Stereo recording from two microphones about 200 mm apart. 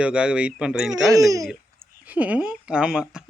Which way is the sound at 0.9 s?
15° right (ahead or behind).